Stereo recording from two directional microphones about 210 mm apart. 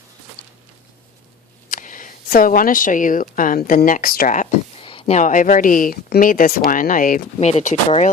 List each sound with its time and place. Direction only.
1.7 s speech: 40° left (ahead or behind)
4.8 s speech: 25° left (ahead or behind)